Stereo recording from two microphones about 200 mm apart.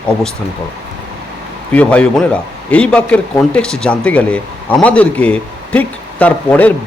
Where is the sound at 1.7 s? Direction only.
5° left (ahead or behind).